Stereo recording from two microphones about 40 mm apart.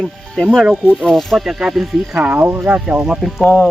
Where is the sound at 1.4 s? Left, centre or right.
Centre.